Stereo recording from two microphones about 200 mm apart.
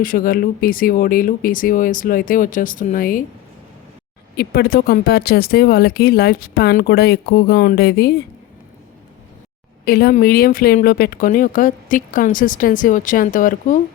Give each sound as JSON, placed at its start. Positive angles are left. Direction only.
{"t": 0.0, "sound": "speech", "side_deg": 45}
{"t": 4.4, "sound": "speech", "side_deg": 50}
{"t": 9.8, "sound": "speech", "side_deg": 50}